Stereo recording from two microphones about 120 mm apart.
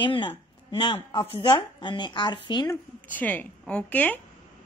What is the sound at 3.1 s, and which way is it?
A woman's voice, 15° left (ahead or behind).